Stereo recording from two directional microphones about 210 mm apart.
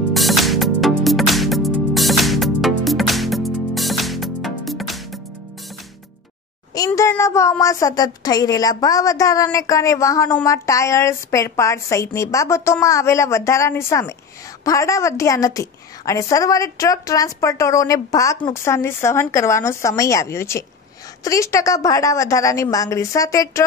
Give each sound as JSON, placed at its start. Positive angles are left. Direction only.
{"t": 0.1, "sound": "music", "side_deg": 0}
{"t": 6.7, "sound": "speech", "side_deg": 15}